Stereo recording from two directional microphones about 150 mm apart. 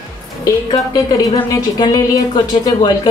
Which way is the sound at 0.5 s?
25° left (ahead or behind).